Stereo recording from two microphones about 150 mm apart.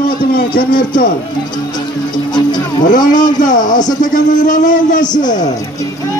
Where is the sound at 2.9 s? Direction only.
60° left (ahead or behind).